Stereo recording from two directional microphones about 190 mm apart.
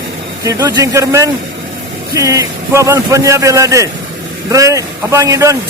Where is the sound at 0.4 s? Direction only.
15° right (ahead or behind).